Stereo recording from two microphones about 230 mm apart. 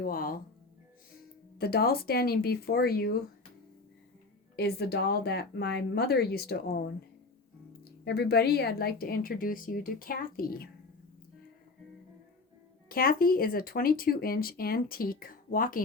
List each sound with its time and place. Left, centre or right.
0.0 s speech: left
1.5 s speech: left
4.5 s speech: left
8.0 s speech: left
12.9 s speech: left